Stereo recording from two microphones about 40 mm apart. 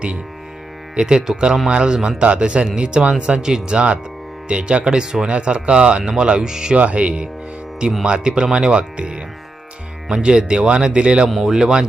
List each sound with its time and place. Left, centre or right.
0.9 s speech: centre
6.7 s speech: right
8.0 s speech: right
11.4 s speech: centre